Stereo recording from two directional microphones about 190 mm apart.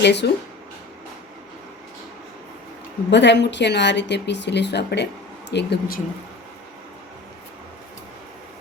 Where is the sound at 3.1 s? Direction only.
65° left (ahead or behind).